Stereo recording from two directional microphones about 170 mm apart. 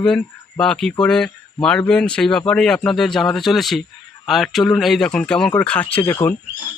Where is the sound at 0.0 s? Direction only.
5° left (ahead or behind).